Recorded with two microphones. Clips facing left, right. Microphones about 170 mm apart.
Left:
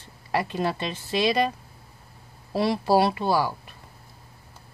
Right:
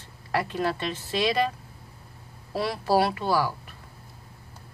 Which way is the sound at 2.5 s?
20° left (ahead or behind).